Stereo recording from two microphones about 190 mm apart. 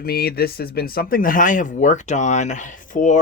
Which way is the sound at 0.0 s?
55° left (ahead or behind).